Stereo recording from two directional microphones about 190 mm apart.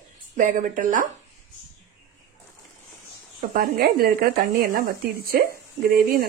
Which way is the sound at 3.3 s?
50° right (ahead or behind).